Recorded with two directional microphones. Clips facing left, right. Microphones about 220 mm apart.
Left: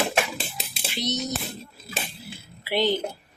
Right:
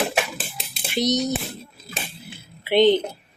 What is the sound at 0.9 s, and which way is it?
Speech, 40° right (ahead or behind).